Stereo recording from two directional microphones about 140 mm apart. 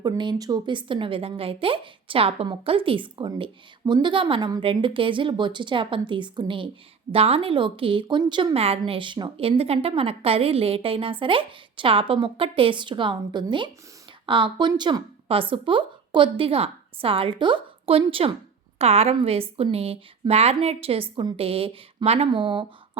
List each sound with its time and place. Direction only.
0.0 s a woman's voice: 30° right (ahead or behind)